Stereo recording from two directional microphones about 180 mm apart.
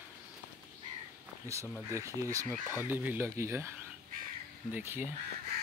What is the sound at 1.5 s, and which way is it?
Speech, 15° right (ahead or behind).